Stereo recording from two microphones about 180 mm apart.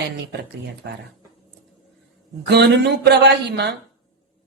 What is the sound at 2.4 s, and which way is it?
A man's voice, 65° right (ahead or behind).